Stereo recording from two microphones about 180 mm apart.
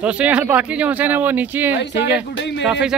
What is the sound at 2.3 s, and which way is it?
Speech, 75° left (ahead or behind).